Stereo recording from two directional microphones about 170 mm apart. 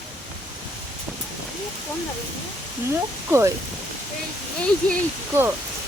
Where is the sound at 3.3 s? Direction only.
15° right (ahead or behind).